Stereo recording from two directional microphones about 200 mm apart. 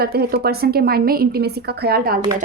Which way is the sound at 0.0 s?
50° right (ahead or behind).